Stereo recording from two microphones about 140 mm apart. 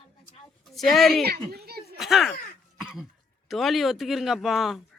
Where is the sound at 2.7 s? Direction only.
Centre (ahead or behind).